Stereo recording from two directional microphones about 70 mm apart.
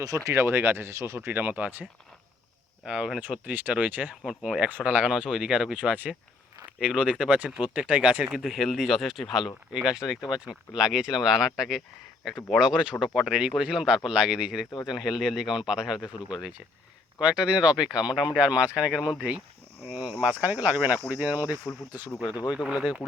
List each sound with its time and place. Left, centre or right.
0.0 s speech: right
0.4 s speech: right
2.8 s speech: centre
4.3 s speech: centre
8.4 s speech: centre
17.2 s speech: centre
21.6 s speech: left
22.6 s speech: centre